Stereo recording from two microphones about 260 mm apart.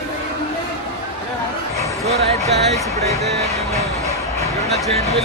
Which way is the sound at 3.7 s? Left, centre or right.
Centre.